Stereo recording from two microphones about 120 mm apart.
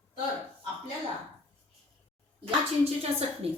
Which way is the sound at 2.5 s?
55° right (ahead or behind).